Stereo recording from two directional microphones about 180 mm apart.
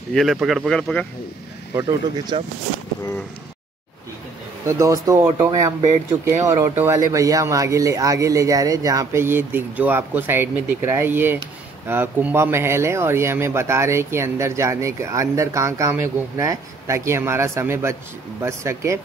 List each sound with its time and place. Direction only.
0.1 s speech: centre (ahead or behind)
1.8 s speech: 20° right (ahead or behind)
4.6 s speech: 15° right (ahead or behind)